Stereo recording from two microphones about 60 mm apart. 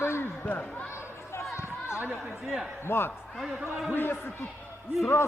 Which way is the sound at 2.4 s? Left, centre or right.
Centre.